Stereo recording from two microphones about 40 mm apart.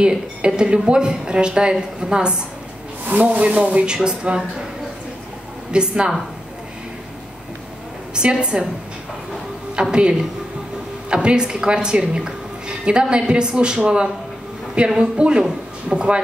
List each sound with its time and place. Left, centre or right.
0.0 s a woman's voice: right
3.1 s a woman's voice: right
5.7 s a woman's voice: right
8.1 s a woman's voice: right
9.8 s a woman's voice: right